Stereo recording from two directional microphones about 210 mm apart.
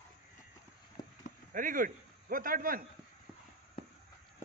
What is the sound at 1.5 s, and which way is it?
A man's voice, 40° right (ahead or behind).